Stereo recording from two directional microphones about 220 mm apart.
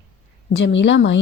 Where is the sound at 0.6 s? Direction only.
55° left (ahead or behind).